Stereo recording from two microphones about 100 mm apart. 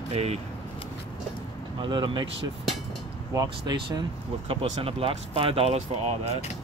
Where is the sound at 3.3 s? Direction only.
40° right (ahead or behind).